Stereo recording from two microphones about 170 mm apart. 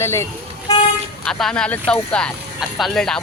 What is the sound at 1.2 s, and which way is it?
A woman's voice, 5° left (ahead or behind).